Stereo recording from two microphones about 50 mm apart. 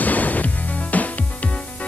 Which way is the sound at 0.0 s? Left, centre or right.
Left.